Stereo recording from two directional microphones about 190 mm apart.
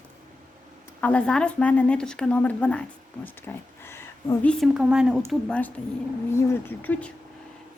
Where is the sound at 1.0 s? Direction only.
5° left (ahead or behind).